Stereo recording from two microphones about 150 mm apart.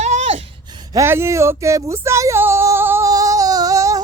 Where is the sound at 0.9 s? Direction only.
15° right (ahead or behind).